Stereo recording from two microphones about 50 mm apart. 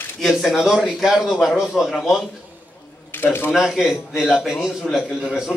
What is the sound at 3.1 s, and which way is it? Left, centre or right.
Speech, left.